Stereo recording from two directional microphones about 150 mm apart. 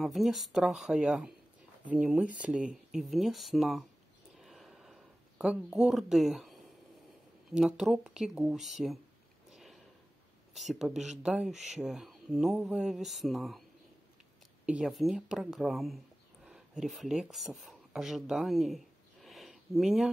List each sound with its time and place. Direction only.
0.0 s speech: centre (ahead or behind)
4.4 s a sound: centre (ahead or behind)
7.5 s speech: centre (ahead or behind)
9.5 s a sound: centre (ahead or behind)
10.5 s speech: centre (ahead or behind)
11.5 s speech: 50° right (ahead or behind)
11.8 s speech: 5° right (ahead or behind)
14.7 s speech: centre (ahead or behind)
19.2 s a sound: centre (ahead or behind)